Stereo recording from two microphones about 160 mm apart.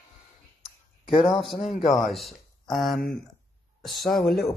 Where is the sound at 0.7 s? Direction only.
35° left (ahead or behind).